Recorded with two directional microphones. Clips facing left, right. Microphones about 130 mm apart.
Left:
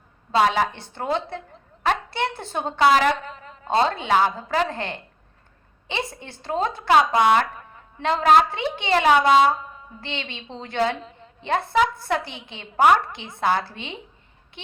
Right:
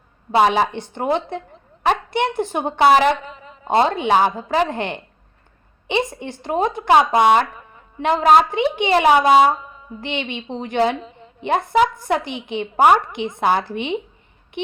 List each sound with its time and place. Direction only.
0.3 s a woman's voice: 20° right (ahead or behind)
3.2 s a sound: 5° right (ahead or behind)
3.7 s a woman's voice: 15° right (ahead or behind)